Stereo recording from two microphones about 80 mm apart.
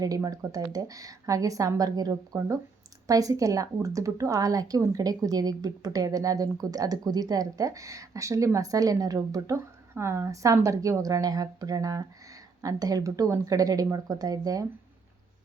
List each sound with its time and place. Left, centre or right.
0.0 s a woman's voice: right
9.9 s a woman's voice: right